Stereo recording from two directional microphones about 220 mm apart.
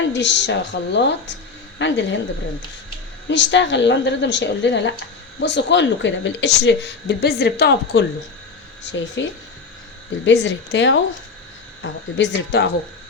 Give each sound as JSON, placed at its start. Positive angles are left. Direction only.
{"t": 0.0, "sound": "speech", "side_deg": 55}
{"t": 3.2, "sound": "speech", "side_deg": 55}
{"t": 10.2, "sound": "speech", "side_deg": 50}